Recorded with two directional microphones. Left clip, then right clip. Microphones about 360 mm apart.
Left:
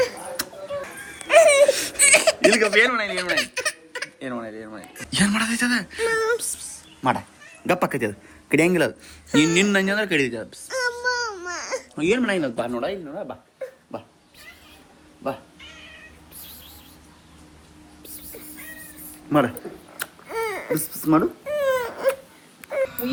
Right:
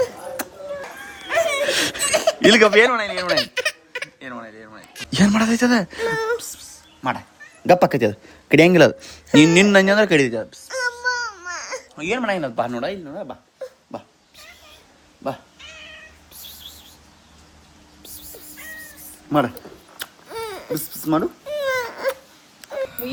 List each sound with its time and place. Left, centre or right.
1.3 s a sound: centre
2.5 s speech: centre
4.9 s speech: centre
7.9 s a man's voice: right
10.7 s baby cry: centre
19.3 s speech: centre
20.3 s babbling: centre
20.7 s speech: centre
21.7 s dog: centre
22.7 s a sound: centre